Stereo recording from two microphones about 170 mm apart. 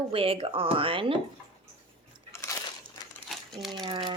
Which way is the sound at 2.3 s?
15° left (ahead or behind).